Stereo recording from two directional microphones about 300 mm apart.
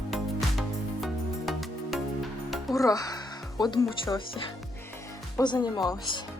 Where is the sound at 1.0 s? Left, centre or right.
Centre.